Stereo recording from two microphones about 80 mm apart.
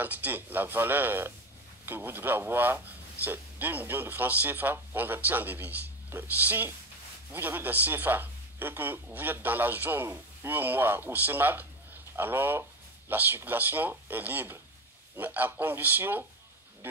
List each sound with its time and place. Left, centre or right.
0.0 s a man's voice: right